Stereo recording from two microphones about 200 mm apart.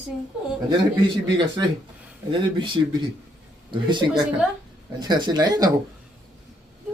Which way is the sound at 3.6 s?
20° right (ahead or behind).